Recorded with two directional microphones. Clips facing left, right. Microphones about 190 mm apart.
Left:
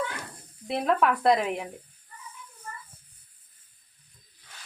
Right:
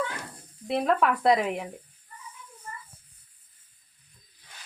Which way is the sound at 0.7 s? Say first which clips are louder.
Even; centre (ahead or behind).